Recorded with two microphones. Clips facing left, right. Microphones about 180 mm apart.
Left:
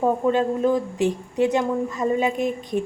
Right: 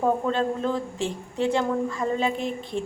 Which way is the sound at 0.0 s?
15° left (ahead or behind).